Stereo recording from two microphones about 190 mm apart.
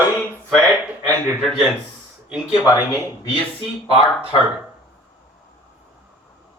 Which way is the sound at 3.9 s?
25° left (ahead or behind).